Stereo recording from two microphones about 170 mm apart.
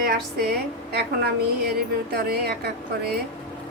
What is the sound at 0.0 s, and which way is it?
A woman's voice, 60° right (ahead or behind).